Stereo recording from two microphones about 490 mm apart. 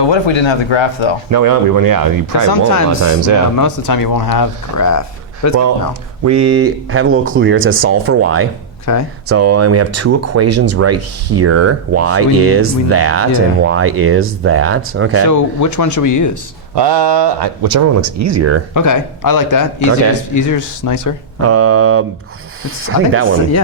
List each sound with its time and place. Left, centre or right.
0.0 s speech: left
1.3 s speech: right
3.6 s speech: left
6.2 s speech: right
8.9 s speech: left
9.3 s speech: right
15.3 s speech: left
16.7 s speech: right
18.7 s speech: left
21.4 s speech: right